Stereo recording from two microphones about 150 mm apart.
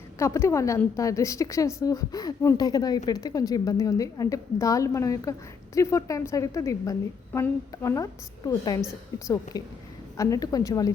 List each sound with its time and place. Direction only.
0.2 s a woman's voice: 20° left (ahead or behind)